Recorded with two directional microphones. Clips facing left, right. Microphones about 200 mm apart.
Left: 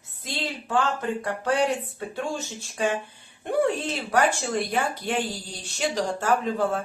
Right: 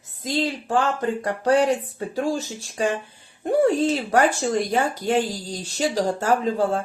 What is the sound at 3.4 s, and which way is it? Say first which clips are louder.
Speech: right 6 dB; 40° right (ahead or behind).